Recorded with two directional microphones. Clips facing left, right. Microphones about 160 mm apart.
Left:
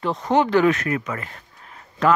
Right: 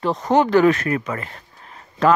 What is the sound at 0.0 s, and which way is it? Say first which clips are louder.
Speech: right 2 dB; 40° right (ahead or behind).